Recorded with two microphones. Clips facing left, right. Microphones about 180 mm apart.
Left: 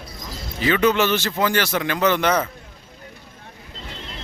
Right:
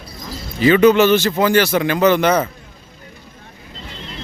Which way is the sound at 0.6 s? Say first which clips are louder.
Right 7 dB; 10° right (ahead or behind).